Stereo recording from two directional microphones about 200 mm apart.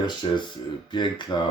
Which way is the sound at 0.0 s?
25° left (ahead or behind).